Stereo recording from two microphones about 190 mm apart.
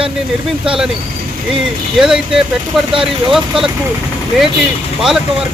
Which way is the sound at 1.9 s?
5° right (ahead or behind).